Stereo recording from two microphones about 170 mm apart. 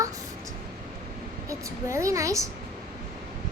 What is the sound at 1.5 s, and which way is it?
A woman's voice, 20° right (ahead or behind).